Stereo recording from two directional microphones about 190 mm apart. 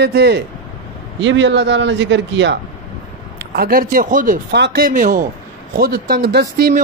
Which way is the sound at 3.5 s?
50° right (ahead or behind).